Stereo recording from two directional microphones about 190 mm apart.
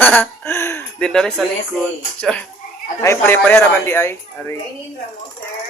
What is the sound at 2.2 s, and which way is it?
Speech, 5° left (ahead or behind).